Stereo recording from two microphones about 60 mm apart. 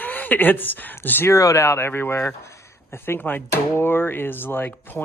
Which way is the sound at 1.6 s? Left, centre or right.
Left.